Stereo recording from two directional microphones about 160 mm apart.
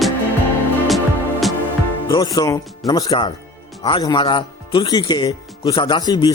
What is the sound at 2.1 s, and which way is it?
Speech, 25° left (ahead or behind).